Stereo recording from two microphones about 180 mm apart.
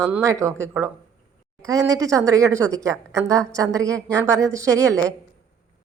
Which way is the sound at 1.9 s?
20° right (ahead or behind).